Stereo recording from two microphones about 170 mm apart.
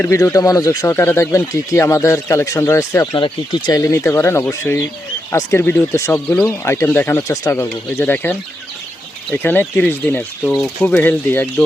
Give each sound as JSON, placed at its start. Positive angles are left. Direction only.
{"t": 0.0, "sound": "speech", "side_deg": 15}